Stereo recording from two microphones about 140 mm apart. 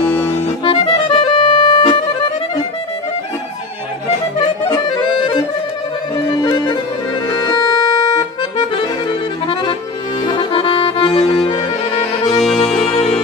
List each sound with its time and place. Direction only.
0.0 s accordion: 15° left (ahead or behind)
0.7 s music: 35° left (ahead or behind)
4.6 s accordion: 30° left (ahead or behind)
6.4 s accordion: 30° left (ahead or behind)
12.4 s accordion: 5° left (ahead or behind)
12.8 s music: 45° left (ahead or behind)